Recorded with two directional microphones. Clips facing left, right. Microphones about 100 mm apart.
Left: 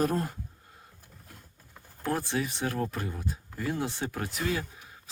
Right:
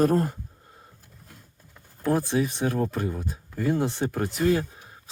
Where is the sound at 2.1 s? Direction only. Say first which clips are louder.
Right 6 dB; 20° right (ahead or behind).